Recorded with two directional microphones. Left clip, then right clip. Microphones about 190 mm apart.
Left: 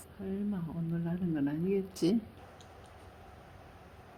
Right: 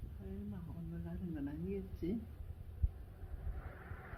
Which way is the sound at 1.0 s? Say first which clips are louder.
Left 11 dB; 55° left (ahead or behind).